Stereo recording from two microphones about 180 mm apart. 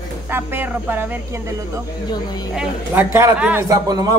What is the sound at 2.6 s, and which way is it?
Speech, 15° right (ahead or behind).